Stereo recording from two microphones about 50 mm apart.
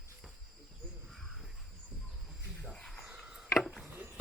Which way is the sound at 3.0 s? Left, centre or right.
Centre.